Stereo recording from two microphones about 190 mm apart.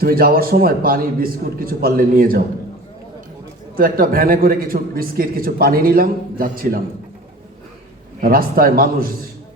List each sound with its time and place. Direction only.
0.0 s a man's voice: 50° right (ahead or behind)
3.8 s a man's voice: 50° right (ahead or behind)
8.2 s a man's voice: 50° right (ahead or behind)